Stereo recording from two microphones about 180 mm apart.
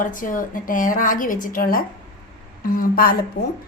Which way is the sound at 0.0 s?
50° left (ahead or behind).